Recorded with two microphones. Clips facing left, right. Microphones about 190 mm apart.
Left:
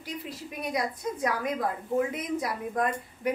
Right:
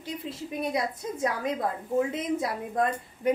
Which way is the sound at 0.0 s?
25° right (ahead or behind).